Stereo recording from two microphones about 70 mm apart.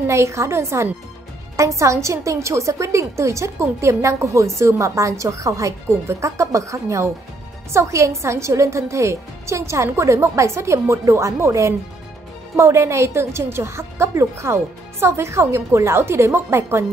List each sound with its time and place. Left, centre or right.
0.0 s a woman's voice: right